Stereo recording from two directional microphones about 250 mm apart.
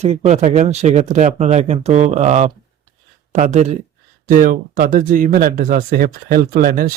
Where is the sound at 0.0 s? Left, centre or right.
Right.